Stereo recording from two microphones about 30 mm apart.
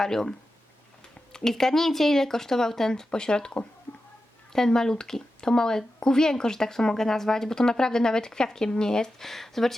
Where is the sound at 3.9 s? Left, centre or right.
Left.